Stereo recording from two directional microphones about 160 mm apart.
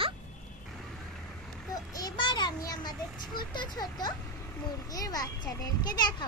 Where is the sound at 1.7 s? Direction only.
25° left (ahead or behind).